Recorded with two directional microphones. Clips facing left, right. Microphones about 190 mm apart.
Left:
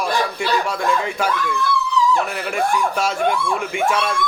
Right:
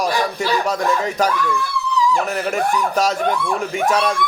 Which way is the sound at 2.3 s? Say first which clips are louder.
Right 1 dB; 40° right (ahead or behind).